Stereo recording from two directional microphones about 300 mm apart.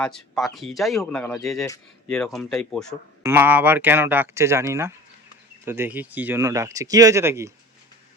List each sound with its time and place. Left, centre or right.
0.0 s speech: centre